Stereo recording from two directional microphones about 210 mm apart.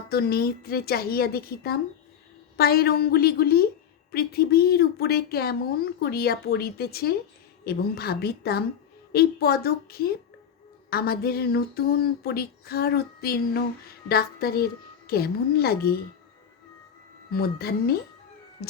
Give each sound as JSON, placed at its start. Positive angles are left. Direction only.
{"t": 0.1, "sound": "speech", "side_deg": 50}
{"t": 17.3, "sound": "speech", "side_deg": 45}
{"t": 18.6, "sound": "music", "side_deg": 45}